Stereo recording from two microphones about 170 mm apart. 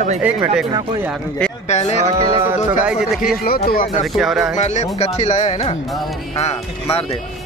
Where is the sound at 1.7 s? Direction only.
40° left (ahead or behind).